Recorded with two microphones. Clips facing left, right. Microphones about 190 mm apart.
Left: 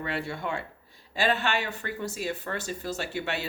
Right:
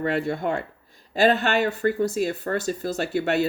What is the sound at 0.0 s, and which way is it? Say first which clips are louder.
Speech: right 8 dB; 45° right (ahead or behind).